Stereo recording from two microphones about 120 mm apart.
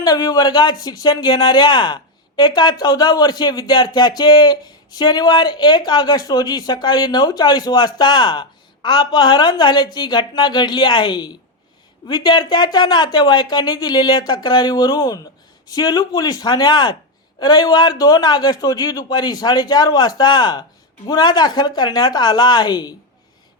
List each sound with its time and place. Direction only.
0.0 s speech: 30° left (ahead or behind)